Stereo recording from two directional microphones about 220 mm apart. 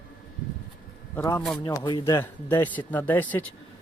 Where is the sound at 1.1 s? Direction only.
15° left (ahead or behind).